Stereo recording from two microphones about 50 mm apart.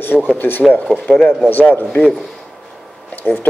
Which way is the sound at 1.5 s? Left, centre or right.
Left.